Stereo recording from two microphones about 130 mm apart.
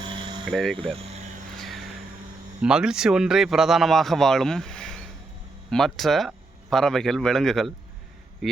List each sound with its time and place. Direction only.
0.1 s a sound: 40° right (ahead or behind)
0.5 s speech: centre (ahead or behind)
1.5 s vehicle: centre (ahead or behind)
2.6 s speech: 5° right (ahead or behind)